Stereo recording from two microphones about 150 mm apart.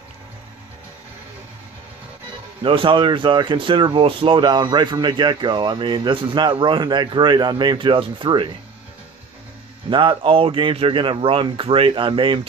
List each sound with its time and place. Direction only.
2.6 s speech: 35° right (ahead or behind)
9.8 s speech: 35° right (ahead or behind)